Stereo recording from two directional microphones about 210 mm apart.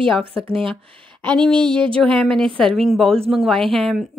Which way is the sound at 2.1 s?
Centre (ahead or behind).